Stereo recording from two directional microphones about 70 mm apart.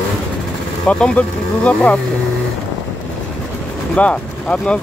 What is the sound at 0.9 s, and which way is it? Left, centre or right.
Speech, centre.